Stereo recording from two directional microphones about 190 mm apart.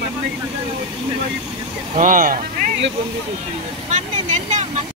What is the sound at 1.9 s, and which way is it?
Speech, 45° right (ahead or behind).